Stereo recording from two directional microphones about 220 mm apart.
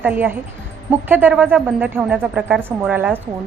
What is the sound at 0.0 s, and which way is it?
A woman's voice, 10° right (ahead or behind).